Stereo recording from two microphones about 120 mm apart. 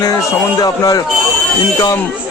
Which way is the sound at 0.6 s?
30° left (ahead or behind).